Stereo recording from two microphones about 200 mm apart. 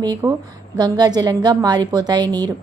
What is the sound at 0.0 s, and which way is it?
A woman's voice, 15° right (ahead or behind).